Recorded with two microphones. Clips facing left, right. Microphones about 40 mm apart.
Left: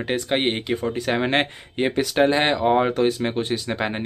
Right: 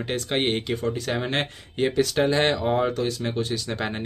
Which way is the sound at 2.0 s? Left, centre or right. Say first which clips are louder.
Left 3 dB; centre.